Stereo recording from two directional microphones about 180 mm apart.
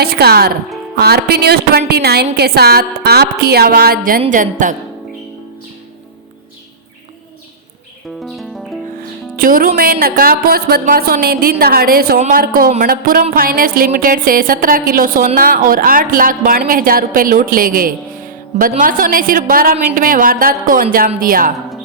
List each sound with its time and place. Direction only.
0.0 s music: 60° right (ahead or behind)
4.3 s a woman's voice: 45° right (ahead or behind)
8.2 s music: centre (ahead or behind)
9.3 s music: 50° right (ahead or behind)
12.3 s a woman's voice: 55° right (ahead or behind)